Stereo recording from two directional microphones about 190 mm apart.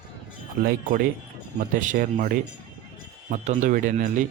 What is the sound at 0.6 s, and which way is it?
Speech, 50° right (ahead or behind).